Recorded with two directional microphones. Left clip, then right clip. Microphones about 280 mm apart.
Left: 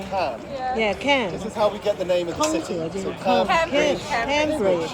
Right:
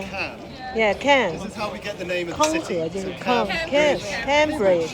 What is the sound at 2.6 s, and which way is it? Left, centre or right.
Speech, centre.